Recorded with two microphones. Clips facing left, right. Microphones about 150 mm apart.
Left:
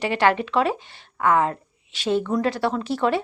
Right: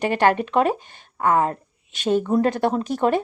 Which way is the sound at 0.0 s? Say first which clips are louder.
Right 2 dB; 45° right (ahead or behind).